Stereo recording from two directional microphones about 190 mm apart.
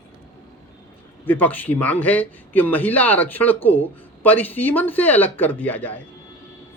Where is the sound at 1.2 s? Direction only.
10° left (ahead or behind).